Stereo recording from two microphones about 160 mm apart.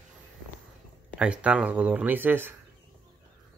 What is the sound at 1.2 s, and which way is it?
Speech, 10° right (ahead or behind).